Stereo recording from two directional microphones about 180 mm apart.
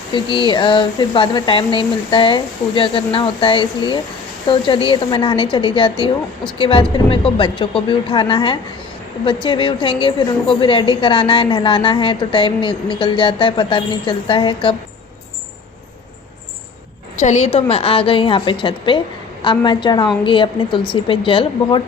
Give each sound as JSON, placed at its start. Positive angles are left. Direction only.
{"t": 0.1, "sound": "a woman's voice", "side_deg": 25}
{"t": 17.2, "sound": "a woman's voice", "side_deg": 40}